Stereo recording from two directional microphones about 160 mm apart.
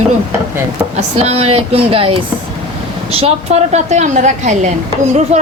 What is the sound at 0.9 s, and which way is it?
A woman's voice, 45° right (ahead or behind).